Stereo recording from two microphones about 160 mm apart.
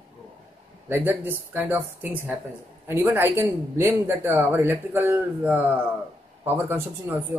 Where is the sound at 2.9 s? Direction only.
15° right (ahead or behind).